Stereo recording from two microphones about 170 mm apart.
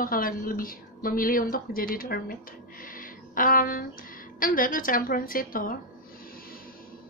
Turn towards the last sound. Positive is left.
turn(degrees=55)  # may be behind; listen again after turning